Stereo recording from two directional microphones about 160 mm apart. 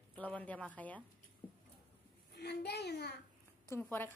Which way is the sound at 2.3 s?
90° left.